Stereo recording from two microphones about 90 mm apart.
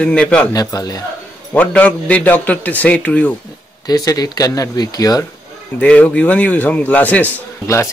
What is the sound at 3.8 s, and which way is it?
Speech, 45° left (ahead or behind).